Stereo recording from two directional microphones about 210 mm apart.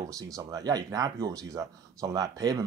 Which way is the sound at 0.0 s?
15° right (ahead or behind).